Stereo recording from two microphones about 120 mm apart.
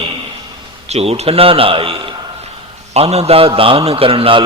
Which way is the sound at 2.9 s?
60° right (ahead or behind).